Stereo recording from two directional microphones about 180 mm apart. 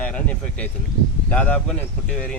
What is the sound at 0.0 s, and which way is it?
Speech, 5° left (ahead or behind).